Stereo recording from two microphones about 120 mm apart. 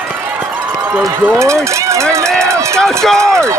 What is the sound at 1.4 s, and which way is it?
Speech, 25° right (ahead or behind).